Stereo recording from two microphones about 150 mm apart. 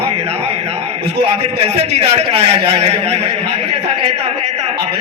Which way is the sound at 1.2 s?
40° right (ahead or behind).